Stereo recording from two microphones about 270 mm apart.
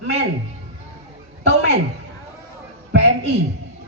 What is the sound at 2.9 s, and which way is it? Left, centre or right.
Speech, right.